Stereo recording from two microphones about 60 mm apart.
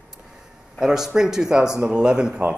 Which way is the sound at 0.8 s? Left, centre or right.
Centre.